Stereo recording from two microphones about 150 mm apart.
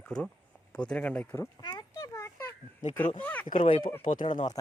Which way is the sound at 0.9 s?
5° left (ahead or behind).